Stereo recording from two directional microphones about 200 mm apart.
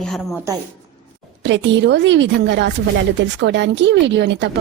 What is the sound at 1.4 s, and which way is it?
A woman's voice, 65° right (ahead or behind).